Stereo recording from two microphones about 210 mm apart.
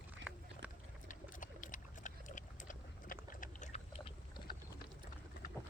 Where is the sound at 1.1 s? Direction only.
40° left (ahead or behind).